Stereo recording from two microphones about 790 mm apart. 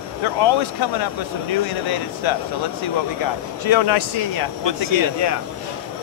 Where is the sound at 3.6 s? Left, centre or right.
Left.